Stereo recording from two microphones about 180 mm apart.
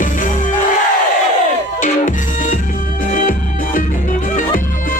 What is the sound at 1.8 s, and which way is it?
Music, 45° left (ahead or behind).